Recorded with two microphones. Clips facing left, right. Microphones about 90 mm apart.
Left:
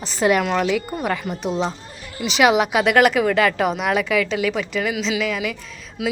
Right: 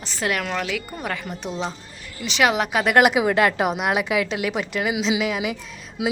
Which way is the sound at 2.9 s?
10° right (ahead or behind).